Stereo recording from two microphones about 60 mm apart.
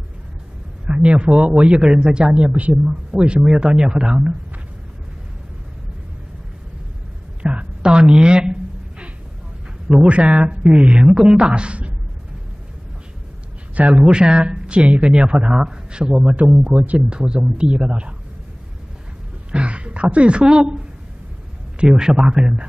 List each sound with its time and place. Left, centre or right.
0.8 s speech: centre
7.4 s a sound: centre
9.8 s speech: centre
13.7 s speech: right
16.3 s speech: right
19.5 s speech: centre
21.9 s speech: centre